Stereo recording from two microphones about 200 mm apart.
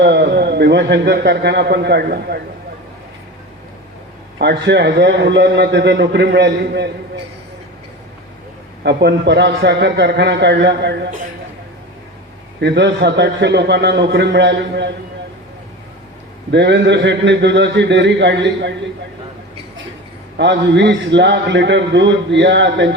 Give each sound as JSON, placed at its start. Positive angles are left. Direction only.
{"t": 0.0, "sound": "a man's voice", "side_deg": -55}
{"t": 4.4, "sound": "a man's voice", "side_deg": -55}
{"t": 8.8, "sound": "a man's voice", "side_deg": -55}
{"t": 12.5, "sound": "a man's voice", "side_deg": -60}
{"t": 16.5, "sound": "a man's voice", "side_deg": -60}
{"t": 20.3, "sound": "a man's voice", "side_deg": -60}